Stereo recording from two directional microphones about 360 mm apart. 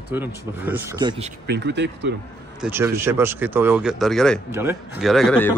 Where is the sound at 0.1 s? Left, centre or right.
Centre.